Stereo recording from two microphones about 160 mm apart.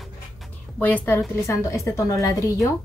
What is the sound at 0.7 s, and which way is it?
A woman's voice, 10° left (ahead or behind).